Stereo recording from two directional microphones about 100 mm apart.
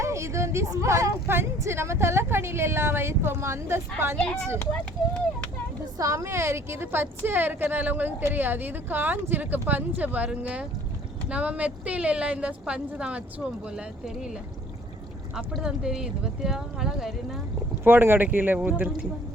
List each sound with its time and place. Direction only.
0.0 s speech: 30° right (ahead or behind)
6.0 s speech: 30° right (ahead or behind); by 14.3 s 10° right (ahead or behind)
15.4 s speech: 5° right (ahead or behind)
17.8 s speech: 20° right (ahead or behind)